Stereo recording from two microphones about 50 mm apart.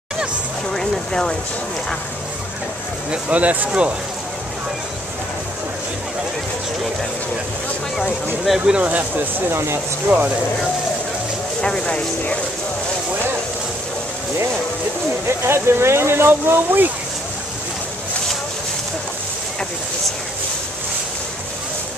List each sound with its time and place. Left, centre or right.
0.7 s a sound: centre
3.1 s speech: right
8.5 s speech: right
8.8 s speech: right
9.5 s speech: right
10.0 s speech: right
11.8 s speech: left
15.2 s speech: right